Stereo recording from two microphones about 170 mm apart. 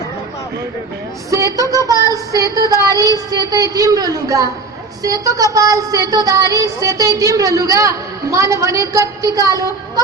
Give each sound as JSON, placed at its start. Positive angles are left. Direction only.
{"t": 1.3, "sound": "child singing", "side_deg": -20}